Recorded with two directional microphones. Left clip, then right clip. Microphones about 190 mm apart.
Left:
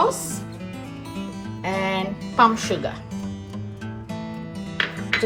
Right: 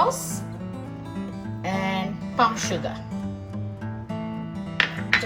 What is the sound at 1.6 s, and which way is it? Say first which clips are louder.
Music: left 3 dB; 40° left (ahead or behind).